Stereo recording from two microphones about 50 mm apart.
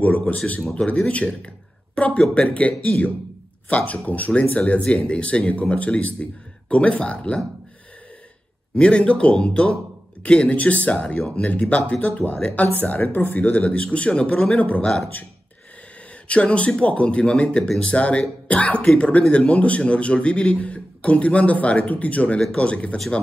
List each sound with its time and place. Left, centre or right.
0.7 s speech: left
8.7 s speech: left
12.0 s speech: left
14.6 s speech: left
16.3 s speech: left